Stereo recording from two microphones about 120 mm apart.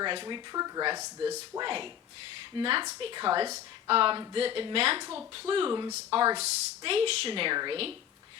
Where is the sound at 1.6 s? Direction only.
45° right (ahead or behind).